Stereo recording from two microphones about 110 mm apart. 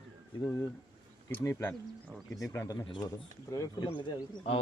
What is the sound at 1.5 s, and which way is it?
Speech, 25° left (ahead or behind).